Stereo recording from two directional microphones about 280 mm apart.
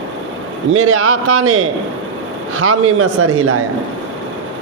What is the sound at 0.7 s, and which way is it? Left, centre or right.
A man's voice, right.